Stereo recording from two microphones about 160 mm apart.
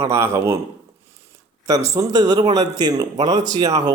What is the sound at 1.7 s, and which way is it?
A man's voice, 20° right (ahead or behind).